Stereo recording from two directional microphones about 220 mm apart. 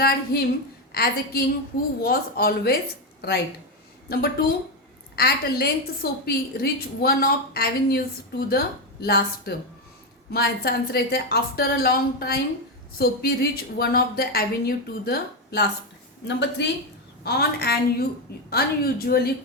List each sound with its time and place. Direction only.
0.3 s a woman's voice: 45° left (ahead or behind)